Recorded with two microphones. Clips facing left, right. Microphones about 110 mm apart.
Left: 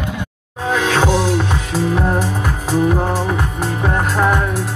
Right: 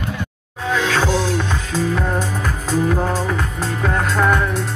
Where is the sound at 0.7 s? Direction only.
20° left (ahead or behind).